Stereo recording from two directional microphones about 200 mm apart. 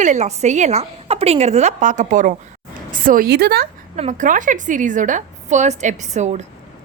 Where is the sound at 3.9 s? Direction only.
35° right (ahead or behind).